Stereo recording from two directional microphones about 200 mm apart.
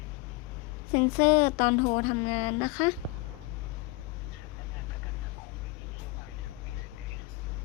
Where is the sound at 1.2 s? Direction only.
35° left (ahead or behind).